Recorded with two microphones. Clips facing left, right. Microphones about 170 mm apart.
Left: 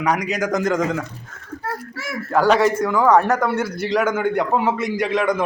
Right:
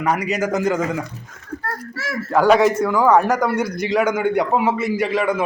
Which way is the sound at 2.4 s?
5° right (ahead or behind).